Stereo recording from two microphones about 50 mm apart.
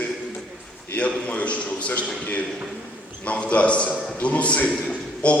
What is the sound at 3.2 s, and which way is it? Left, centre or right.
A man's voice, left.